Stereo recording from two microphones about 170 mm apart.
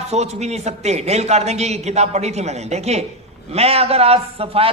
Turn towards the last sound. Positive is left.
turn(degrees=-35)  # may be behind; listen again after turning